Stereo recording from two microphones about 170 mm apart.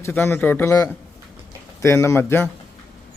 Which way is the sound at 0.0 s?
15° left (ahead or behind).